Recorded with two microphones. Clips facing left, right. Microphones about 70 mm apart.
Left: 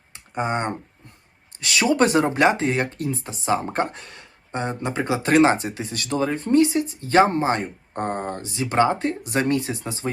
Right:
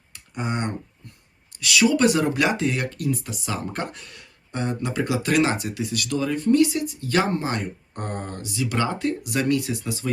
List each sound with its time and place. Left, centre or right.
0.1 s clicking: left
1.5 s speech: left